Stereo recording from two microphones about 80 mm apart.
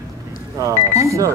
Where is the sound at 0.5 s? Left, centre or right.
Right.